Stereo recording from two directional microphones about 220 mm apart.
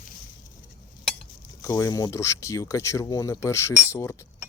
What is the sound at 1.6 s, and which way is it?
Speech, 15° left (ahead or behind).